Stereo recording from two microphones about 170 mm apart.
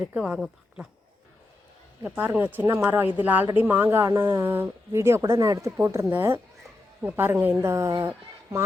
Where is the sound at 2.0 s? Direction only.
10° right (ahead or behind).